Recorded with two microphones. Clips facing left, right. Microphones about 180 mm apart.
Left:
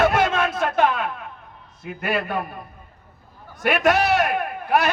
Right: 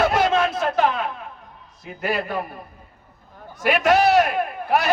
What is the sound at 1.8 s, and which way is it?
Speech, 55° left (ahead or behind).